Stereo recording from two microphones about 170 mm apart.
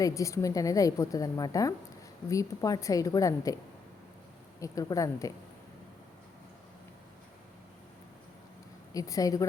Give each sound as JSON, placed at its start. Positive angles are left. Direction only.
{"t": 0.0, "sound": "a woman's voice", "side_deg": 20}
{"t": 4.6, "sound": "a woman's voice", "side_deg": 20}
{"t": 8.9, "sound": "a woman's voice", "side_deg": 20}